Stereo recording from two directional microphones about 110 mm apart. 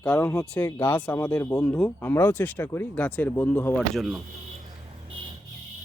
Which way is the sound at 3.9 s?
Centre (ahead or behind).